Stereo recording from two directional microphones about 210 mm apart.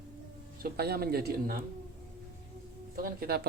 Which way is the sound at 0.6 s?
50° right (ahead or behind).